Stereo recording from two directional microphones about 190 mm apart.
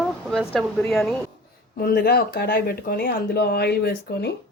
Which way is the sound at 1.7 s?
55° left (ahead or behind).